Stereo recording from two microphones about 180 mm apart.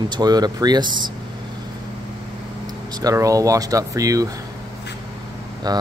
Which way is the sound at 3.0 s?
20° right (ahead or behind).